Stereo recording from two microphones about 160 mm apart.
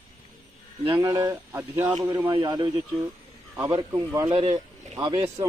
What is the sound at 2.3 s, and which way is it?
Speech, 30° right (ahead or behind).